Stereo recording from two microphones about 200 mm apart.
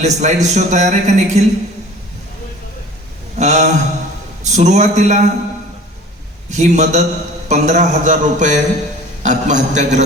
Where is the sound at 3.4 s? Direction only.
35° right (ahead or behind).